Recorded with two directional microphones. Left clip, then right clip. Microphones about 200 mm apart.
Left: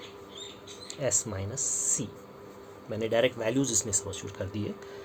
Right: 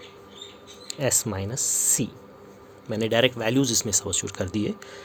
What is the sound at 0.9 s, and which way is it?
Speech, 50° right (ahead or behind).